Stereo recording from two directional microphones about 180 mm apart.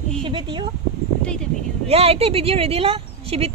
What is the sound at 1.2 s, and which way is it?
Speech, 5° left (ahead or behind).